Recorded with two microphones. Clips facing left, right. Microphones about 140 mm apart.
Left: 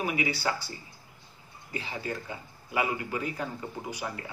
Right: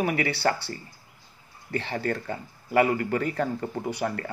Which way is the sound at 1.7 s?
65° right (ahead or behind).